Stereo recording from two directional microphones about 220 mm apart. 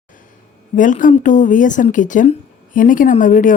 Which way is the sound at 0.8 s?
35° left (ahead or behind).